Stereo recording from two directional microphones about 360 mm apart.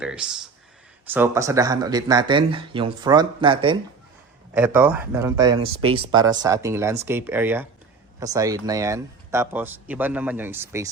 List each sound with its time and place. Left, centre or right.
0.0 s speech: centre